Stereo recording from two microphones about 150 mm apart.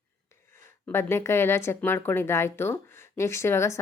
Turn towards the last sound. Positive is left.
turn(degrees=15)  # may be behind; listen again after turning